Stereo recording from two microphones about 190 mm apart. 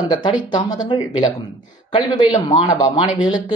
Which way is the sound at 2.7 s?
20° left (ahead or behind).